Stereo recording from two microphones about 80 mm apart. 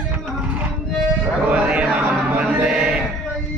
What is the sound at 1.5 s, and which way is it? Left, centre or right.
Music, centre.